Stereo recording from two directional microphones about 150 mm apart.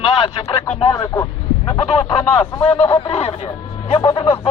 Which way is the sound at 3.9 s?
30° left (ahead or behind).